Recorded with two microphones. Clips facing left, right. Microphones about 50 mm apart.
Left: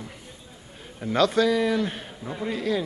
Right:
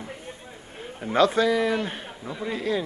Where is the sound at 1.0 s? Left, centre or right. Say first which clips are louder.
Right 1 dB; centre.